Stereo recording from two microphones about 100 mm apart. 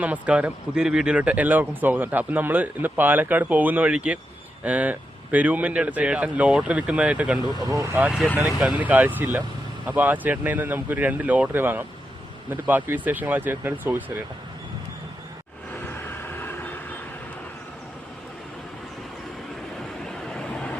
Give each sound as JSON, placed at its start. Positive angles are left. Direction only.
{"t": 0.0, "sound": "speech", "side_deg": -15}
{"t": 7.6, "sound": "speech", "side_deg": -35}
{"t": 8.8, "sound": "speech", "side_deg": -15}
{"t": 16.0, "sound": "vehicle", "side_deg": 20}
{"t": 20.1, "sound": "vehicle", "side_deg": 5}